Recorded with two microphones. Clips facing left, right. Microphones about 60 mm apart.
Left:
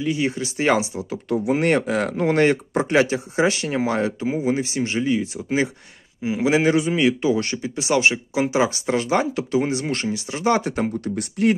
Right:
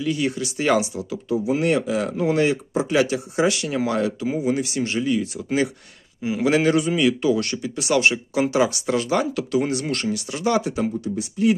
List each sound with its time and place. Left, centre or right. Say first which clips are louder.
0.0 s speech: left 1 dB; left
1.5 s a man's voice: left 2 dB; left; by 8.6 s centre
8.6 s speech: left 1 dB; left
11.1 s speech: even; left